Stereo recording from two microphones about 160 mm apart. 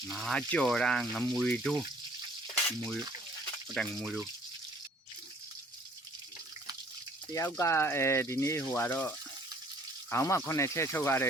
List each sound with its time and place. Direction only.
0.1 s speech: centre (ahead or behind)
2.6 s speech: 5° left (ahead or behind)
7.3 s speech: 20° left (ahead or behind)